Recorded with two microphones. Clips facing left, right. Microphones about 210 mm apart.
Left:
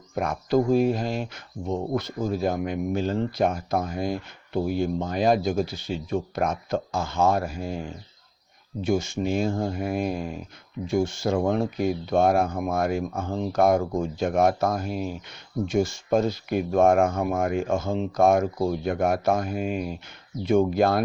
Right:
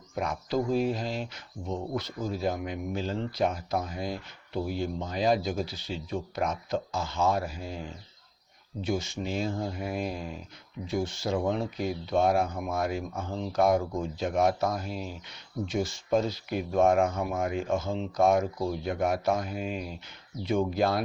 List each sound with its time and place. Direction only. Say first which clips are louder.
0.1 s speech: left 6 dB; 50° left (ahead or behind)